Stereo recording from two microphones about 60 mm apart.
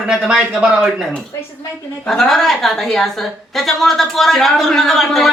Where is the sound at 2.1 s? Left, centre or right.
Centre.